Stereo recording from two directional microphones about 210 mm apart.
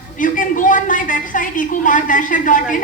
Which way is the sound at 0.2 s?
40° left (ahead or behind).